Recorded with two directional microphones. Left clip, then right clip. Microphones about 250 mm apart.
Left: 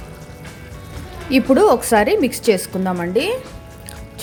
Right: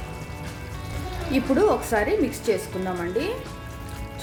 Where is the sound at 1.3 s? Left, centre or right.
Left.